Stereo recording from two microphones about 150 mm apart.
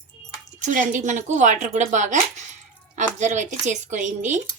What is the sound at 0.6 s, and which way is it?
A woman's voice, 60° right (ahead or behind).